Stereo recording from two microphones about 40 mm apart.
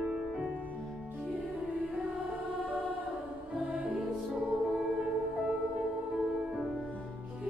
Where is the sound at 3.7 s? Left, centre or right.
Right.